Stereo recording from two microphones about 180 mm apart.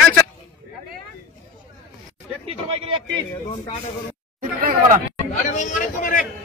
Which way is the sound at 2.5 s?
35° right (ahead or behind).